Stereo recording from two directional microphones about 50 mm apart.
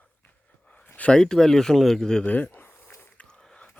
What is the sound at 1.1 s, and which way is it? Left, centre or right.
Speech, centre.